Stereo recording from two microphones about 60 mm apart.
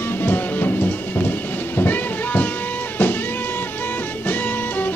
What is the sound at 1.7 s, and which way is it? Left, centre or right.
Music, left.